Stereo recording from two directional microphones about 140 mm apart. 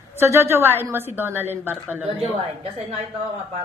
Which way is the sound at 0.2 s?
20° right (ahead or behind).